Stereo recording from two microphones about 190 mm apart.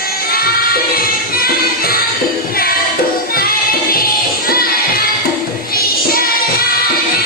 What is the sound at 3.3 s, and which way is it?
Music, 50° left (ahead or behind).